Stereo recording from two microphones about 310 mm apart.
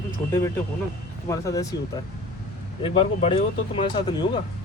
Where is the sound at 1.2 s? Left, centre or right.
Centre.